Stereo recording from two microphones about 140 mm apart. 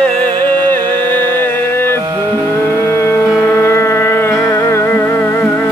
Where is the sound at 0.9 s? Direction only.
35° right (ahead or behind).